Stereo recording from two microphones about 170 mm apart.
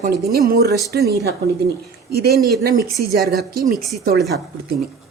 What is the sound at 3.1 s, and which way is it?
Speech, 60° right (ahead or behind).